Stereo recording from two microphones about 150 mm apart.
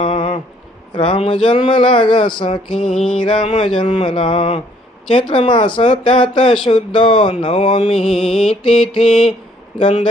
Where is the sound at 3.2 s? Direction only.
35° left (ahead or behind).